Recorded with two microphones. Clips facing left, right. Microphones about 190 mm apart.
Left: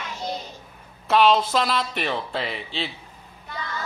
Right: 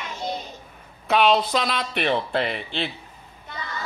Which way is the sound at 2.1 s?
60° right (ahead or behind).